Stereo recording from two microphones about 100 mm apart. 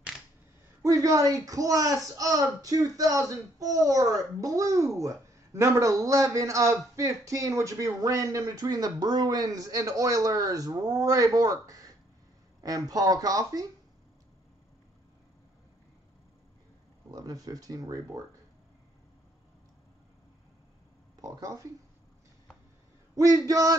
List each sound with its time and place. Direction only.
0.8 s speech: 35° right (ahead or behind)
17.1 s speech: 40° right (ahead or behind)
21.2 s speech: 35° right (ahead or behind)
23.1 s speech: 35° right (ahead or behind)